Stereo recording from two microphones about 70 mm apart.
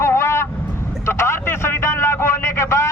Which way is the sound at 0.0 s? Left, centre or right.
Left.